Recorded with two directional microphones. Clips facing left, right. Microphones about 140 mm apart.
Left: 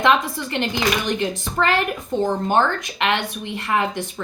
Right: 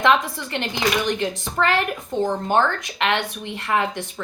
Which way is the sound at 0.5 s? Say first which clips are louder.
Left 1 dB; 15° left (ahead or behind).